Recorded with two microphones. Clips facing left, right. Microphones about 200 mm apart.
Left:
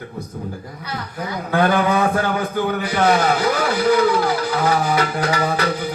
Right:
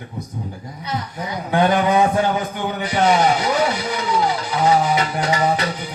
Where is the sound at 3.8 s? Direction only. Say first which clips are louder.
Left 5 dB; 60° left (ahead or behind).